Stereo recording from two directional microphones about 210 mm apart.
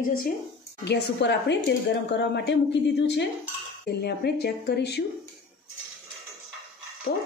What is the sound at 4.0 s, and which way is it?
Speech, 50° left (ahead or behind).